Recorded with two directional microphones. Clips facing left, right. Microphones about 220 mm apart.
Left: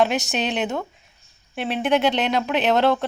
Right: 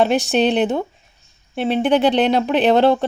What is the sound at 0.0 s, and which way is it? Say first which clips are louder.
Speech: right 6 dB; 30° right (ahead or behind).